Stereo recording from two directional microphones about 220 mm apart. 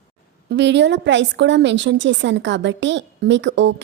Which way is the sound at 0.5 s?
55° right (ahead or behind).